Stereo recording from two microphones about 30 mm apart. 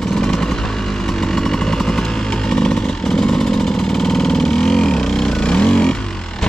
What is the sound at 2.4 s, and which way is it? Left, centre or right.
Vehicle, left.